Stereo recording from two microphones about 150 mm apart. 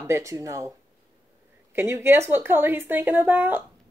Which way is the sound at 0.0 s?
20° right (ahead or behind).